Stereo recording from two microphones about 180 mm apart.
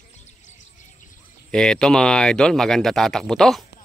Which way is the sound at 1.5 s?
5° left (ahead or behind).